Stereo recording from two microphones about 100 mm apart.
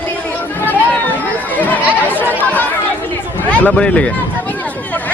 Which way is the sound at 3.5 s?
15° left (ahead or behind).